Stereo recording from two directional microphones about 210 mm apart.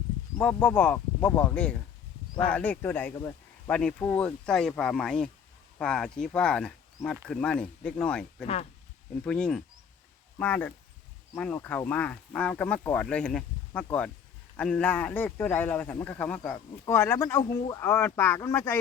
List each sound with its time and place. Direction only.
0.3 s speech: 5° left (ahead or behind)